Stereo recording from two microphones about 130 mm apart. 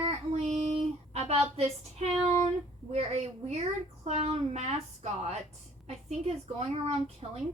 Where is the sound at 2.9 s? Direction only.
55° right (ahead or behind).